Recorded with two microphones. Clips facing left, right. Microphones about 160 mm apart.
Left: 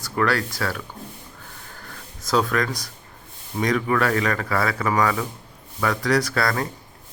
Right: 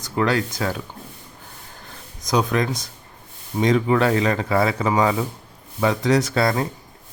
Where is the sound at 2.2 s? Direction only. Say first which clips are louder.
Right 1 dB; 20° right (ahead or behind).